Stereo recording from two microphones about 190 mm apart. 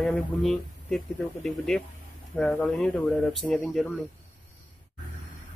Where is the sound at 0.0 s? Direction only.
Centre (ahead or behind).